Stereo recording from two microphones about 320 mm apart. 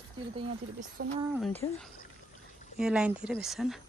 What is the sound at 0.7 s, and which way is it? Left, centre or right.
Speech, right.